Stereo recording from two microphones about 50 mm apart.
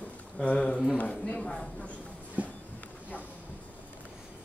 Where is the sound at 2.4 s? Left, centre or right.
Right.